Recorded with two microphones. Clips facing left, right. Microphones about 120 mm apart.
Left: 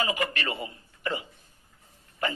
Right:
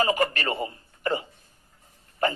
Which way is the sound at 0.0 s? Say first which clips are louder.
Right 5 dB; 40° right (ahead or behind).